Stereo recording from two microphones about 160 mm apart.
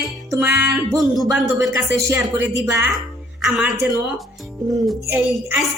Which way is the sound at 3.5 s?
5° right (ahead or behind).